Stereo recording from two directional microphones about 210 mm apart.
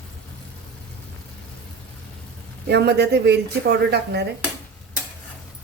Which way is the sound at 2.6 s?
55° right (ahead or behind).